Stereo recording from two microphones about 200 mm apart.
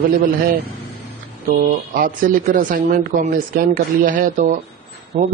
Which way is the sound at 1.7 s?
45° right (ahead or behind).